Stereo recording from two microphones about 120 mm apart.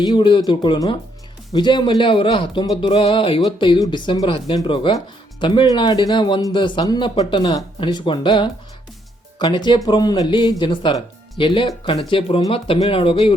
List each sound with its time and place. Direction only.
0.0 s speech: 35° left (ahead or behind)
2.8 s music: 50° left (ahead or behind)
3.8 s speech: 40° left (ahead or behind)
7.8 s music: 40° left (ahead or behind)
9.4 s speech: 40° left (ahead or behind)
10.6 s music: 45° left (ahead or behind)